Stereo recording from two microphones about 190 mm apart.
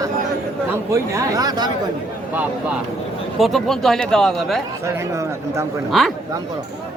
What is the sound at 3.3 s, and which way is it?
Speech, centre (ahead or behind).